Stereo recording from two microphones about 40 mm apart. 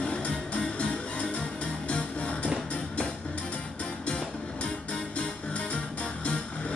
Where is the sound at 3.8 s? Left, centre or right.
Left.